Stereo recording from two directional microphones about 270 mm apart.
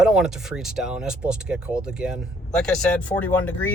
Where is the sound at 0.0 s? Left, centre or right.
Centre.